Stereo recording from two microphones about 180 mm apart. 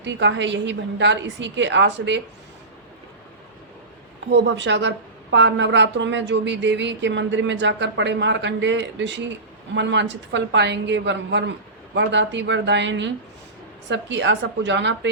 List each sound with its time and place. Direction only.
0.0 s a woman's voice: 80° right
4.3 s a woman's voice: 75° right (ahead or behind)